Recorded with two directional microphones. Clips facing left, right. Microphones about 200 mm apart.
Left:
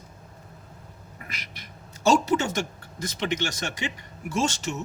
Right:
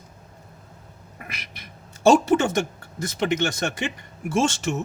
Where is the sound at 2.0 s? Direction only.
55° right (ahead or behind).